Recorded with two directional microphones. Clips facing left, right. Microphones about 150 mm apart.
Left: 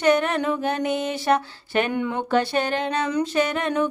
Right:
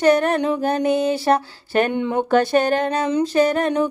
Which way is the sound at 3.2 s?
35° right (ahead or behind).